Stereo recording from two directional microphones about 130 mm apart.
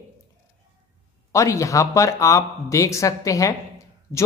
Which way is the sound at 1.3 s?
25° left (ahead or behind).